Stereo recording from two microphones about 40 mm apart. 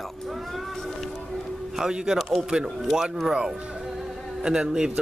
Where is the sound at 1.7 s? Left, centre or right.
Centre.